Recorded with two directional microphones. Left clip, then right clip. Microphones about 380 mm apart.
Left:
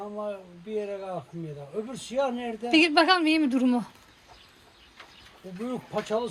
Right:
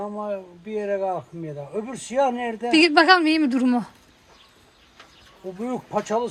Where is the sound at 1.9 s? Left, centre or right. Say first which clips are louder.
Right 7 dB; centre.